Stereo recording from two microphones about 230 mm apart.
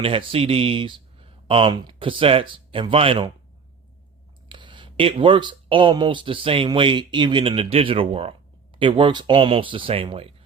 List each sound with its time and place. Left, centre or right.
0.0 s speech: right
4.4 s speech: right